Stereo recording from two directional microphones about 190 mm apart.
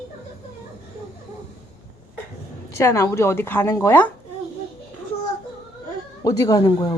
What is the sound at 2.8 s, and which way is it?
Speech, 15° left (ahead or behind).